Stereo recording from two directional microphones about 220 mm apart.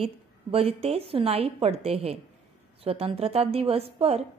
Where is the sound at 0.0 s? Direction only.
25° right (ahead or behind).